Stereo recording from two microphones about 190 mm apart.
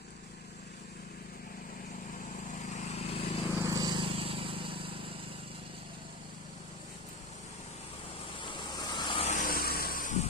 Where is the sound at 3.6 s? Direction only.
20° right (ahead or behind).